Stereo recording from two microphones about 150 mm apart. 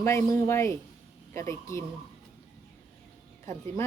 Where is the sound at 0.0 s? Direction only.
20° left (ahead or behind).